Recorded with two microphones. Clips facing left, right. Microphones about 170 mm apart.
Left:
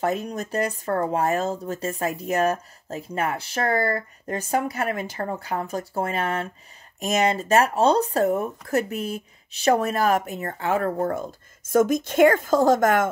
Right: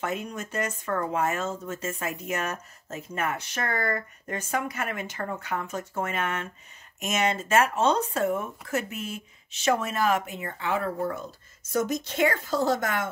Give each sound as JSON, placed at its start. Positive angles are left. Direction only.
{"t": 0.0, "sound": "speech", "side_deg": 35}